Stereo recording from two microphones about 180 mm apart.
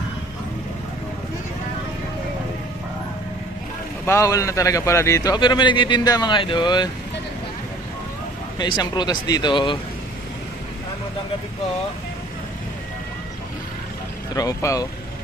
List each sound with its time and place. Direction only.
4.0 s a man's voice: 15° left (ahead or behind)
8.5 s a man's voice: 25° left (ahead or behind)
14.3 s a man's voice: 20° left (ahead or behind)